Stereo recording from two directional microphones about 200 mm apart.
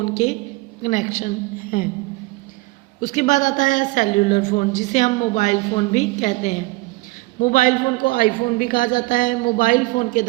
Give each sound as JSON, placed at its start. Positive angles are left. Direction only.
{"t": 0.0, "sound": "a woman's voice", "side_deg": 35}
{"t": 3.0, "sound": "a woman's voice", "side_deg": 40}